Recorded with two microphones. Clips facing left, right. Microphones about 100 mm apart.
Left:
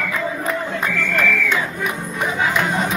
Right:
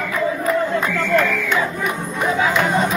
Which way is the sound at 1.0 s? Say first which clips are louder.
Right 2 dB; 50° right (ahead or behind).